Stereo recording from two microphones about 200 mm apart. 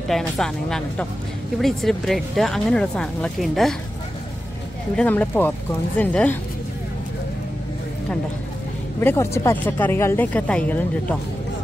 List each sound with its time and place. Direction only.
0.4 s speech: 5° left (ahead or behind)
4.9 s speech: 10° left (ahead or behind)
9.0 s speech: 15° left (ahead or behind)